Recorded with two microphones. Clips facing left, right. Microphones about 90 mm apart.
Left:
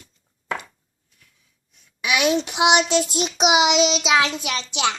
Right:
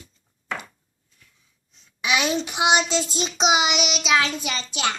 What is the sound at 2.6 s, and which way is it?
Child singing, 70° left (ahead or behind).